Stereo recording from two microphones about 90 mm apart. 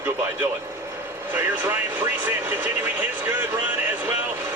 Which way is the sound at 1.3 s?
20° right (ahead or behind).